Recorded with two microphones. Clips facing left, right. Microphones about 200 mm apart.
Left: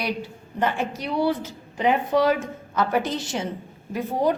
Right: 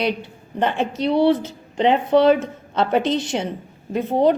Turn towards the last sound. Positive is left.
turn(degrees=-25)  # may be behind; listen again after turning